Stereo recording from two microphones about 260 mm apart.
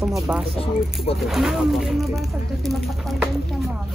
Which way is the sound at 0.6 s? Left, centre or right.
Left.